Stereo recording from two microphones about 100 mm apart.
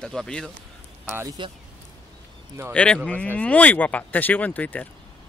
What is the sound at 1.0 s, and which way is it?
Speech, 25° right (ahead or behind).